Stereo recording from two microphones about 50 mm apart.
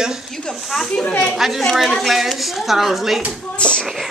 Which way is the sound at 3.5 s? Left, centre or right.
Centre.